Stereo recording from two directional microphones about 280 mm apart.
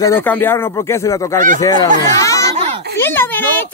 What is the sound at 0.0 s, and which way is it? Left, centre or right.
Speech, centre.